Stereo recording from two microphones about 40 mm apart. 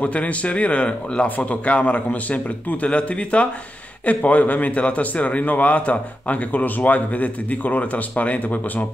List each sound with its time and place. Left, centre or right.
0.0 s a man's voice: left